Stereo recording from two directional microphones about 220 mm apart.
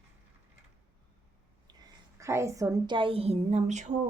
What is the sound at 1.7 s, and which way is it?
A woman's voice, 15° right (ahead or behind).